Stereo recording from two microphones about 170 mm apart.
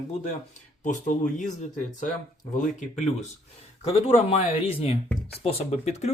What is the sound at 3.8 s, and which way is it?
Speech, 35° left (ahead or behind).